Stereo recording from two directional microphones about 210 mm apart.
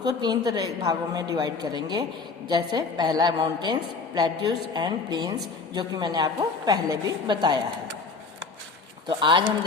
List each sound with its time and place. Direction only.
0.2 s a woman's voice: 20° right (ahead or behind)
9.0 s a woman's voice: 20° right (ahead or behind)